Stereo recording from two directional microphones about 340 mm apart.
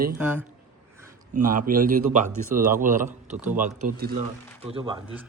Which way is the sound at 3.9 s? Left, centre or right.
Right.